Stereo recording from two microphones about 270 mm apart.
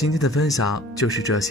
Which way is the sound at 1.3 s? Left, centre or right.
Left.